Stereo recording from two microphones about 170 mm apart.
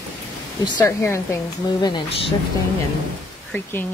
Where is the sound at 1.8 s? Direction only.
30° left (ahead or behind).